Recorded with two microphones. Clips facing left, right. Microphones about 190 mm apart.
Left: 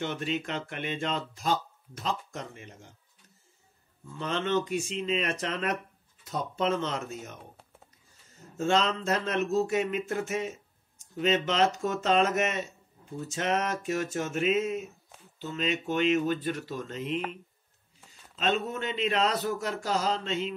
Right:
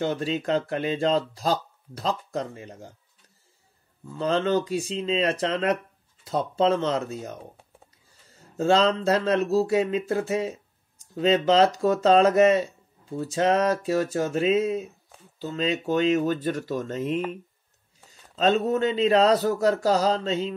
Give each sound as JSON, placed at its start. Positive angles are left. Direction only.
{"t": 0.0, "sound": "speech", "side_deg": -35}
{"t": 4.2, "sound": "speech", "side_deg": -35}
{"t": 8.5, "sound": "speech", "side_deg": -35}
{"t": 15.9, "sound": "speech", "side_deg": -40}
{"t": 18.4, "sound": "speech", "side_deg": -35}